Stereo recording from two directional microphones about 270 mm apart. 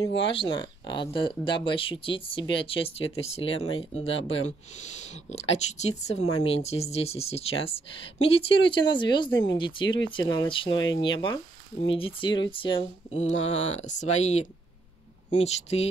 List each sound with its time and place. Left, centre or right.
0.0 s speech: centre